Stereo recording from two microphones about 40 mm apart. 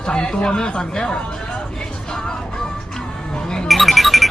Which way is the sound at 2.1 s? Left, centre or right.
Centre.